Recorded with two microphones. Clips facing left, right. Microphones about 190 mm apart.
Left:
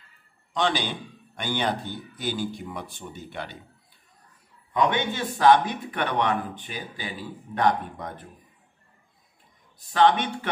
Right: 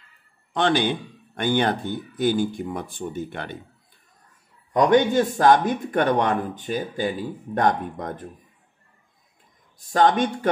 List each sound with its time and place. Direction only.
0.5 s speech: 55° right (ahead or behind)
4.7 s speech: 45° right (ahead or behind)
9.9 s speech: 45° right (ahead or behind)